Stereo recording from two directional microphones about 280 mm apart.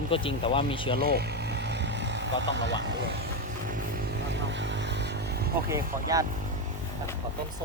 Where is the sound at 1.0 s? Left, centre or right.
Right.